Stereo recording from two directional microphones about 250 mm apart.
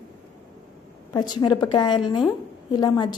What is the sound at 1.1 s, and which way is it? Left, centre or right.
A woman's voice, centre.